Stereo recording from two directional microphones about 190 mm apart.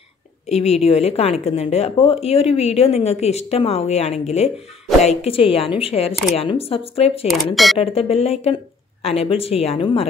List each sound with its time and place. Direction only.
0.5 s speech: 35° left (ahead or behind)
7.5 s speech: centre (ahead or behind)
7.8 s speech: 30° left (ahead or behind)